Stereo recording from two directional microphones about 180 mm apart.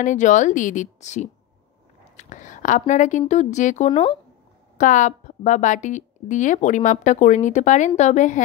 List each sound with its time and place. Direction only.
0.0 s a woman's voice: 45° left (ahead or behind)